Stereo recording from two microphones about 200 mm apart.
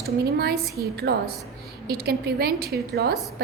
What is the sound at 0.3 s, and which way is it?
A woman's voice, 50° right (ahead or behind).